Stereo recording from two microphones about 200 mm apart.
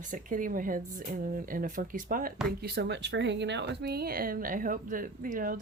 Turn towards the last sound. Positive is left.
turn(degrees=-40)  # may be behind; listen again after turning